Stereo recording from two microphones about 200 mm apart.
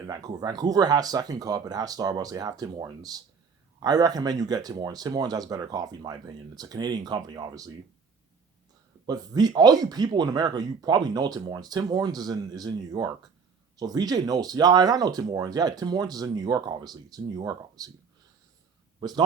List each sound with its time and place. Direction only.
0.0 s speech: 20° right (ahead or behind)
9.0 s speech: 20° right (ahead or behind)
18.9 s speech: 20° right (ahead or behind)